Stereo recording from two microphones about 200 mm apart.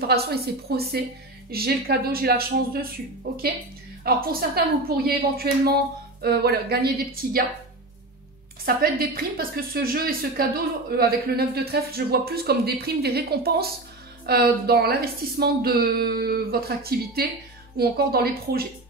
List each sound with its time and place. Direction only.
0.0 s a woman's voice: 50° right (ahead or behind)
8.6 s a woman's voice: 50° right (ahead or behind)